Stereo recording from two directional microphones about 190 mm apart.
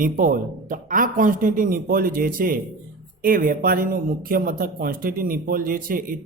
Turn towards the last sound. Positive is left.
turn(degrees=-50)  # may be behind; listen again after turning